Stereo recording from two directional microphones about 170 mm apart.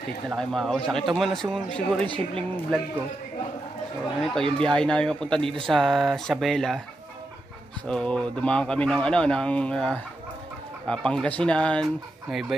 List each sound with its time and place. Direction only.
0.4 s speech: centre (ahead or behind)
2.0 s speech: 30° right (ahead or behind)
4.3 s speech: 5° left (ahead or behind)
7.8 s speech: 5° left (ahead or behind)